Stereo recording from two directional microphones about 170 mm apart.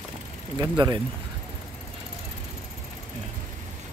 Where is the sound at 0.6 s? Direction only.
25° right (ahead or behind).